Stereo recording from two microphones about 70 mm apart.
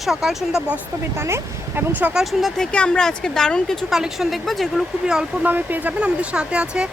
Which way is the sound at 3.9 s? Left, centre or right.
Centre.